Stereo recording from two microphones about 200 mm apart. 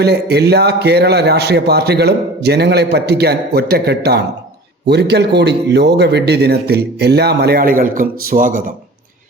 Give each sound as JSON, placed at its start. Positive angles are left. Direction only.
{"t": 0.0, "sound": "a man's voice", "side_deg": -55}